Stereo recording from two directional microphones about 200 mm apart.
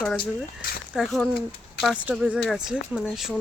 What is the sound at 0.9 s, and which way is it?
Speech, centre (ahead or behind).